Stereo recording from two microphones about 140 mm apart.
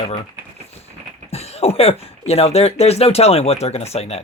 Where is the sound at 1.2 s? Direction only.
50° left (ahead or behind).